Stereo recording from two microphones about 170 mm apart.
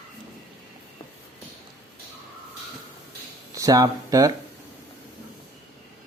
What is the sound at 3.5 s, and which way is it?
Speech, 20° right (ahead or behind).